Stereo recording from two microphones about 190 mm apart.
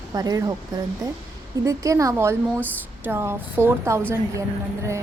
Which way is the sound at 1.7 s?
15° right (ahead or behind).